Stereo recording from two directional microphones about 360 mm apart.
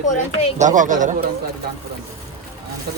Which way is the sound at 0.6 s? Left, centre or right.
Right.